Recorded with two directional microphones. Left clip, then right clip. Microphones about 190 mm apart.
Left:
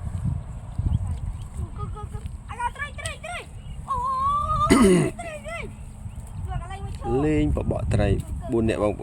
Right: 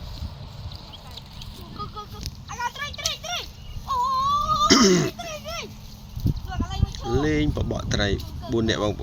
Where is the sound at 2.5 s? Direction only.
20° left (ahead or behind).